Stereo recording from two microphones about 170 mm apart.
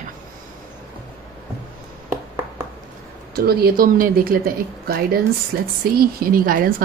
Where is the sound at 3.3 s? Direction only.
65° right (ahead or behind).